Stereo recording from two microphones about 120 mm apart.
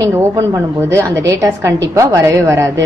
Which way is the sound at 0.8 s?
20° right (ahead or behind).